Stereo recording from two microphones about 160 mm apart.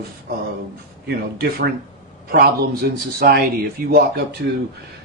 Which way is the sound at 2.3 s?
70° right (ahead or behind).